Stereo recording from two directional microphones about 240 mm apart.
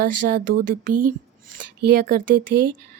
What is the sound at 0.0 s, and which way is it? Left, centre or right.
Speech, right.